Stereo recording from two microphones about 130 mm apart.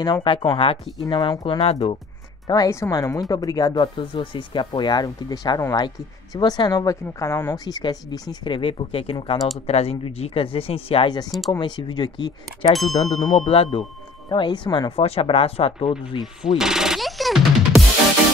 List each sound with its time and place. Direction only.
0.0 s speech: 40° left (ahead or behind)
1.0 s speech: 35° left (ahead or behind)
1.6 s speech: 50° left (ahead or behind)
2.4 s speech: 30° left (ahead or behind); by 11.1 s 45° left (ahead or behind)
11.5 s speech: 35° left (ahead or behind)
13.1 s speech: 60° left (ahead or behind)
14.3 s speech: 35° left (ahead or behind)
15.0 s speech: 50° left (ahead or behind)
16.4 s speech: 5° right (ahead or behind)